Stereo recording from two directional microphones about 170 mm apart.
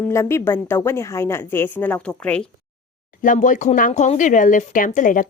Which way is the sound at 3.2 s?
50° left (ahead or behind).